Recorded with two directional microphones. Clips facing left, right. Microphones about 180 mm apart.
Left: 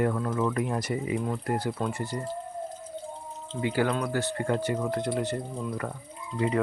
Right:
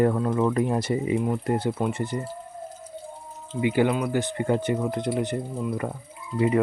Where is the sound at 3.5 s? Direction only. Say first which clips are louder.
Right 5 dB; 15° right (ahead or behind).